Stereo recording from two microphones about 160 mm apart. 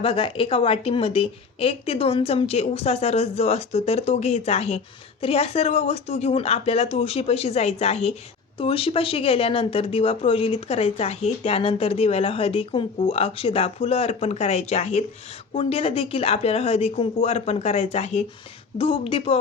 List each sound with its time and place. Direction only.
0.0 s speech: 35° left (ahead or behind)